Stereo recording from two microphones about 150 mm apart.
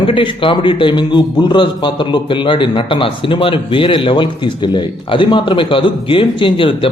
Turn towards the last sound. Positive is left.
turn(degrees=35)  # may be behind; listen again after turning